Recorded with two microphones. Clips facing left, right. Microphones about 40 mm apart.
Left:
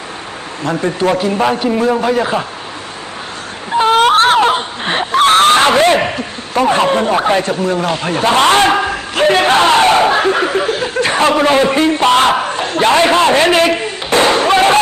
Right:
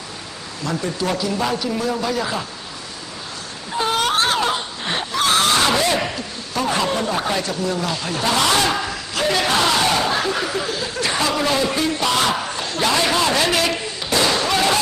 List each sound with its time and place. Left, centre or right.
0.6 s a man's voice: left
3.8 s speech: left